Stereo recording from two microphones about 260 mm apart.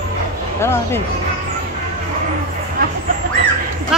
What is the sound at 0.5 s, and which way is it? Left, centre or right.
Speech, centre.